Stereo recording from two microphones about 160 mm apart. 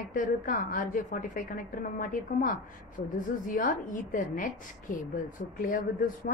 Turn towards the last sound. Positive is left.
turn(degrees=60)  # may be behind; listen again after turning